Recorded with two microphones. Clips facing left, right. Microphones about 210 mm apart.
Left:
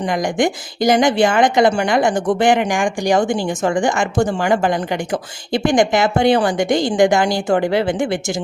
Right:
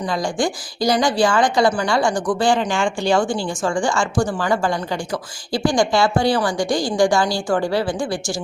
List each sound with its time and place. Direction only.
0.3 s a woman's voice: 20° left (ahead or behind)